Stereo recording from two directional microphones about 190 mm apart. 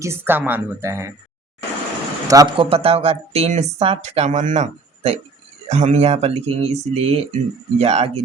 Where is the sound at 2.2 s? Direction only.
20° right (ahead or behind).